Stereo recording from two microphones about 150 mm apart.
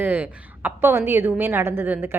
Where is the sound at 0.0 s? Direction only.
10° right (ahead or behind).